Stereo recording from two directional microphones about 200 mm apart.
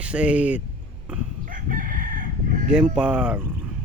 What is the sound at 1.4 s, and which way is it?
Chicken, 45° right (ahead or behind).